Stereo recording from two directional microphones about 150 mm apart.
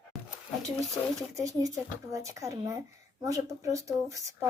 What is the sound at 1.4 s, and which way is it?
A woman's voice, 20° right (ahead or behind).